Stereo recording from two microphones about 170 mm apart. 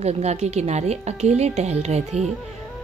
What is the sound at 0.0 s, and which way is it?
A woman's voice, 40° right (ahead or behind).